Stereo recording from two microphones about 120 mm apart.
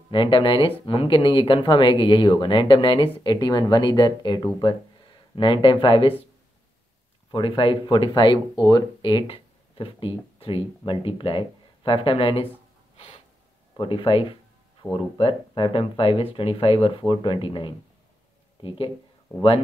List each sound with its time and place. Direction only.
0.1 s speech: 45° left (ahead or behind)
7.2 s speech: 45° left (ahead or behind)
12.9 s snort: 55° left (ahead or behind)
13.7 s speech: 45° left (ahead or behind)
14.8 s speech: 15° left (ahead or behind)
15.1 s speech: 45° left (ahead or behind)